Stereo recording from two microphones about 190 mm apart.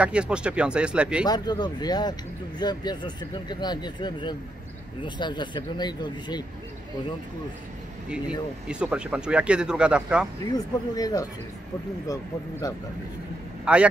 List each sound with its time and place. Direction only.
0.0 s speech: 5° right (ahead or behind)
1.2 s speech: 20° left (ahead or behind)
8.1 s speech: 5° right (ahead or behind)
10.5 s speech: 20° left (ahead or behind)
13.7 s speech: 5° right (ahead or behind)